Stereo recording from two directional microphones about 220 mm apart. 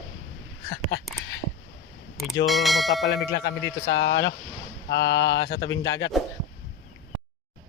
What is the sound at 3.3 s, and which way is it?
Speech, 50° left (ahead or behind).